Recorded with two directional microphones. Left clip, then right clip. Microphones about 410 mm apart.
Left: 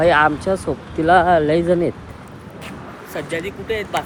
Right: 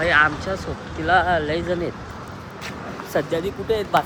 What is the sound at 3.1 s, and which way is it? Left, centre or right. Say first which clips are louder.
Speech: right 2 dB; centre.